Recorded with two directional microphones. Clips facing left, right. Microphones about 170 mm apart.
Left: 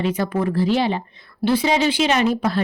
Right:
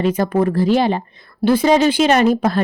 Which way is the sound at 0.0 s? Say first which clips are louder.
Right 5 dB; 45° right (ahead or behind).